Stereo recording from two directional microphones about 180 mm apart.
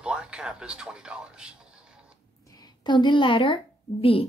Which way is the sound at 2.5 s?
25° left (ahead or behind).